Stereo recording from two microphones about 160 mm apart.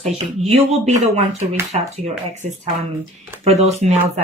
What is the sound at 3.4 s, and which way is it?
Speech, 40° right (ahead or behind).